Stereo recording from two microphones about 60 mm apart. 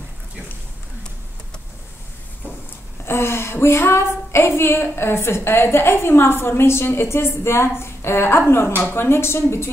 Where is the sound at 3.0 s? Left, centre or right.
Left.